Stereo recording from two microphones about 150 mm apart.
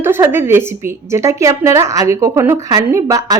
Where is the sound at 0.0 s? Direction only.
15° right (ahead or behind).